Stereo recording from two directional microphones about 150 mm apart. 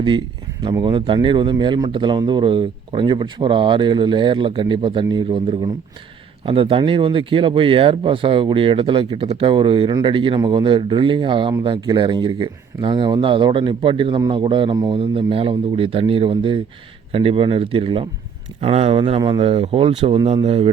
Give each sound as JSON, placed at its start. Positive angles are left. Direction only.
{"t": 0.6, "sound": "speech", "side_deg": -30}
{"t": 20.1, "sound": "speech", "side_deg": -30}